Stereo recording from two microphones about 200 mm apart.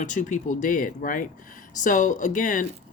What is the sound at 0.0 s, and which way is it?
Speech, 40° left (ahead or behind).